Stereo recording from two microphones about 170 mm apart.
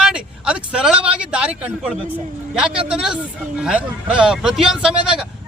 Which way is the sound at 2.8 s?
5° right (ahead or behind).